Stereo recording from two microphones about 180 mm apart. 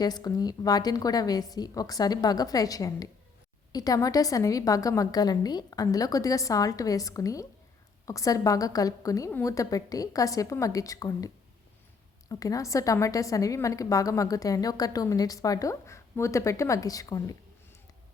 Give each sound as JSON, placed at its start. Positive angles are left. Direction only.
{"t": 0.0, "sound": "a woman's voice", "side_deg": 20}
{"t": 12.3, "sound": "a woman's voice", "side_deg": 20}